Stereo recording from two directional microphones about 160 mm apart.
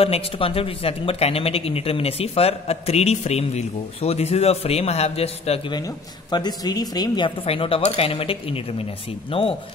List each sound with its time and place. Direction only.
0.0 s speech: 35° left (ahead or behind)
5.7 s speech: 25° left (ahead or behind)